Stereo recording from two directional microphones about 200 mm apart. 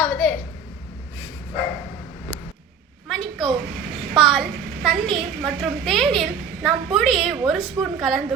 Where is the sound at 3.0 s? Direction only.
Centre (ahead or behind).